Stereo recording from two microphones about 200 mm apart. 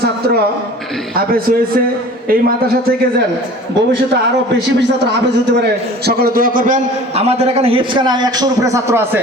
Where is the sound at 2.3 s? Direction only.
50° right (ahead or behind).